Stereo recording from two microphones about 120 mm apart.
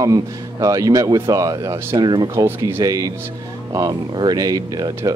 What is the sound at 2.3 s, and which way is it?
Speech, 25° right (ahead or behind).